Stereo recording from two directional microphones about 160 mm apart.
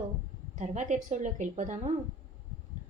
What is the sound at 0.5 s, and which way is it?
A woman's voice, 50° right (ahead or behind).